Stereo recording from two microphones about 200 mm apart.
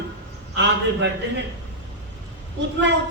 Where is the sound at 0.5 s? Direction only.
60° right (ahead or behind).